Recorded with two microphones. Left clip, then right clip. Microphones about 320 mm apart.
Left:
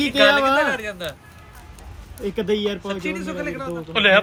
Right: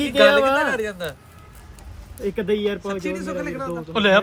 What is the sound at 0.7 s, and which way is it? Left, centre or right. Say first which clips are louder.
Speech: right 1 dB; right.